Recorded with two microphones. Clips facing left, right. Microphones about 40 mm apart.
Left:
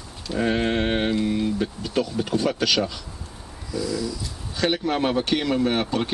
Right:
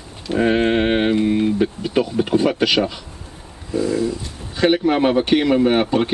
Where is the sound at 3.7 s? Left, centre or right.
Right.